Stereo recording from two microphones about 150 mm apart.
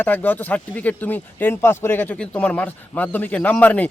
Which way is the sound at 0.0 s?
10° left (ahead or behind).